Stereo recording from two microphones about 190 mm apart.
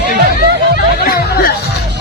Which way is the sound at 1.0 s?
55° left (ahead or behind).